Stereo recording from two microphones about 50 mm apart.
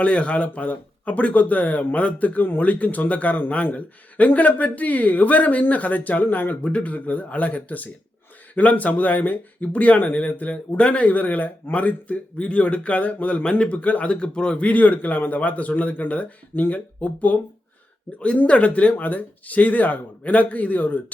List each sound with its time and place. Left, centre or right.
0.0 s speech: left
6.7 s speech: left